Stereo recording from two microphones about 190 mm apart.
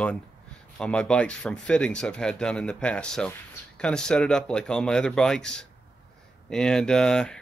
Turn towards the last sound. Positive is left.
turn(degrees=5)  # may be behind; listen again after turning